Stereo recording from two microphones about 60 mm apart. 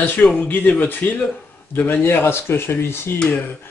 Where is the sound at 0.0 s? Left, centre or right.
Left.